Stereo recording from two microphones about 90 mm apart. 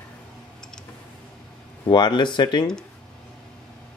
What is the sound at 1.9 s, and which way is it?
Speech, 55° left (ahead or behind).